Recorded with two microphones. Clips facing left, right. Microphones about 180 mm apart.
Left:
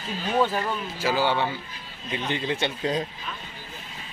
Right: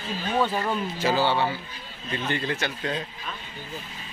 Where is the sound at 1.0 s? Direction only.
10° left (ahead or behind).